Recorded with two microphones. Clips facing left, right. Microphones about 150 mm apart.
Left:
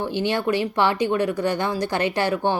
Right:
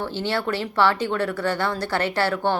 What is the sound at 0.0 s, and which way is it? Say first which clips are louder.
A woman's voice: left 2 dB; 15° left (ahead or behind).